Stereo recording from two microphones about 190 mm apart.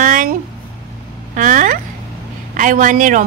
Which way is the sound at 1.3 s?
45° right (ahead or behind).